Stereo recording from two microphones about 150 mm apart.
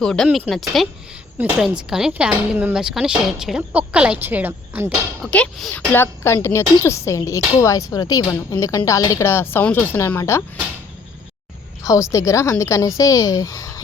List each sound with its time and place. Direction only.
0.0 s speech: 5° left (ahead or behind); by 4.9 s 10° right (ahead or behind)
5.2 s speech: 5° left (ahead or behind)
5.9 s speech: 15° left (ahead or behind)
11.8 s speech: 20° left (ahead or behind)